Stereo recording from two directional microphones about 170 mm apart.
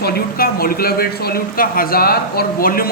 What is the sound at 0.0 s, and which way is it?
A man's voice, 65° left (ahead or behind).